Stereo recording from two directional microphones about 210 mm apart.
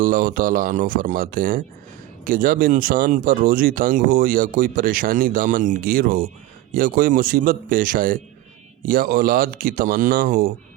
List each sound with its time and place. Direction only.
0.0 s speech: 40° right (ahead or behind)